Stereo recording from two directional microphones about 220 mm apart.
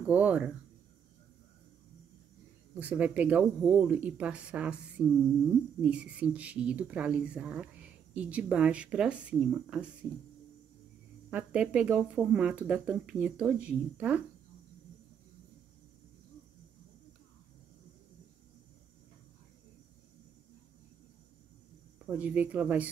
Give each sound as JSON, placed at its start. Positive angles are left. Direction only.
{"t": 0.0, "sound": "speech", "side_deg": -5}
{"t": 2.7, "sound": "speech", "side_deg": -5}
{"t": 11.2, "sound": "speech", "side_deg": -5}
{"t": 21.9, "sound": "speech", "side_deg": -5}